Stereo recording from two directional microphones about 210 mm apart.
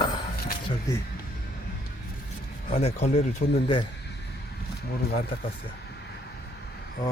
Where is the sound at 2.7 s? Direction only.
30° left (ahead or behind).